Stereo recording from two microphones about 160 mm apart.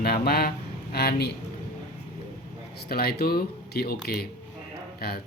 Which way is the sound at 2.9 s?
75° left (ahead or behind).